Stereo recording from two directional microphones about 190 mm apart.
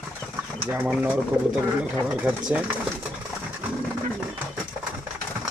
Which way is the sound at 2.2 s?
5° right (ahead or behind).